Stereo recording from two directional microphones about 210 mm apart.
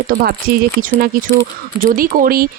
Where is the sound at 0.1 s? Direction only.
45° right (ahead or behind).